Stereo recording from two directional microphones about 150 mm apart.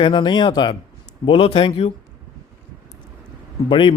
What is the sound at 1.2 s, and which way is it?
Speech, 40° left (ahead or behind).